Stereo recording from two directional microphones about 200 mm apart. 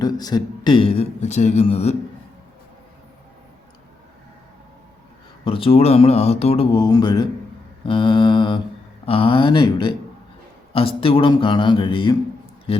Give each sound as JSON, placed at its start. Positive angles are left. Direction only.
{"t": 0.0, "sound": "a man's voice", "side_deg": 20}
{"t": 5.5, "sound": "a man's voice", "side_deg": 25}